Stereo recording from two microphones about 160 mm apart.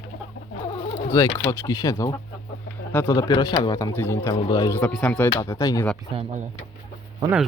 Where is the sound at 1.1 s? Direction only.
20° left (ahead or behind).